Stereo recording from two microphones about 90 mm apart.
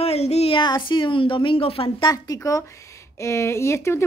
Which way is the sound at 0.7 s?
60° left (ahead or behind).